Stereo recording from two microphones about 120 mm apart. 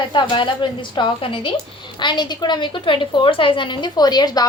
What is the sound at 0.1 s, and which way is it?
A woman's voice, 40° left (ahead or behind).